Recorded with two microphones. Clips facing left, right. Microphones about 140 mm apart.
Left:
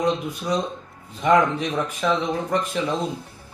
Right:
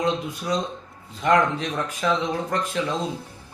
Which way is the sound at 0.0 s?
5° left (ahead or behind).